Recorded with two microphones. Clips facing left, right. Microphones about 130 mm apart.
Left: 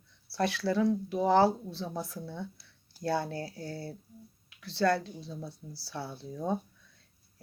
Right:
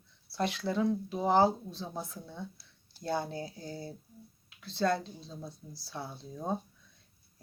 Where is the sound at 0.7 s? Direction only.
20° right (ahead or behind).